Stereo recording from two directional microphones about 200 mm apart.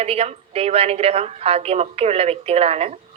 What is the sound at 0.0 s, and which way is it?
A woman's voice, 30° right (ahead or behind).